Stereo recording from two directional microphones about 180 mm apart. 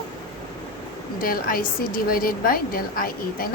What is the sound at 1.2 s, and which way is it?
A woman's voice, 55° left (ahead or behind).